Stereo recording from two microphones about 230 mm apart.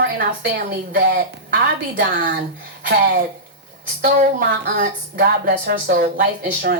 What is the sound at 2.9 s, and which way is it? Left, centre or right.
Speech, right.